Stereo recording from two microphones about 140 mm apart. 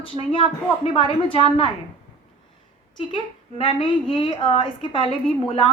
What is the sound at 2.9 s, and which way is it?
A woman's voice, 35° left (ahead or behind).